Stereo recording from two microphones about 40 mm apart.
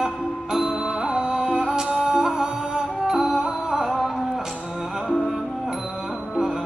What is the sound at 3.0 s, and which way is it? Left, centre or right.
Music, centre.